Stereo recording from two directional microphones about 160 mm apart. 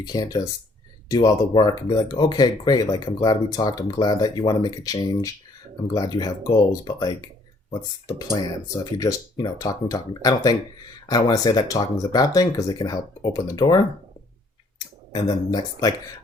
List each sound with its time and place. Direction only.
0.0 s speech: 25° left (ahead or behind)